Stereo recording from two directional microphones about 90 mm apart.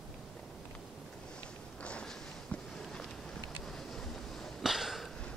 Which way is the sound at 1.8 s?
10° left (ahead or behind).